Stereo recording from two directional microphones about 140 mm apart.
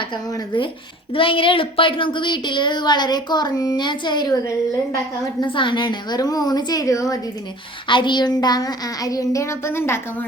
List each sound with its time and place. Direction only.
0.0 s a woman's voice: 35° left (ahead or behind)
7.9 s speech: 35° left (ahead or behind); by 10.2 s 15° left (ahead or behind)